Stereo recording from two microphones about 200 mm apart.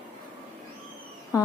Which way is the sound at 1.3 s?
20° left (ahead or behind).